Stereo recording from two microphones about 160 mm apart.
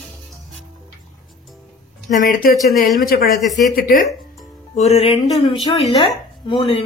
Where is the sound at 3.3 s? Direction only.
Centre (ahead or behind).